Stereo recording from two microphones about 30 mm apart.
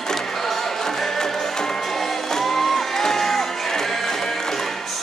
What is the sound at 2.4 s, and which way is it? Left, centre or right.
Music, centre.